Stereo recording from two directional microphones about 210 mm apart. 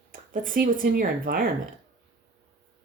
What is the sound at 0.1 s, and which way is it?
Speech, 40° right (ahead or behind).